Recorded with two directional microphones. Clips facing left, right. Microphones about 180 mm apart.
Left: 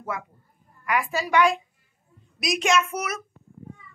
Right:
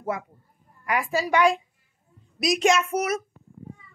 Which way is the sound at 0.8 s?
35° right (ahead or behind).